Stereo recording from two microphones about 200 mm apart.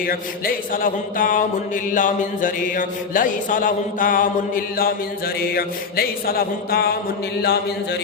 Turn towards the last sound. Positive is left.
turn(degrees=55)  # may be behind; listen again after turning